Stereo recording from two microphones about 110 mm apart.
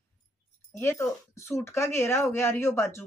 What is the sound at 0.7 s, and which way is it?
Speech, 25° left (ahead or behind).